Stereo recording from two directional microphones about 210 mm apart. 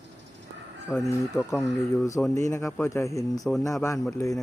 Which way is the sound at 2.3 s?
15° left (ahead or behind).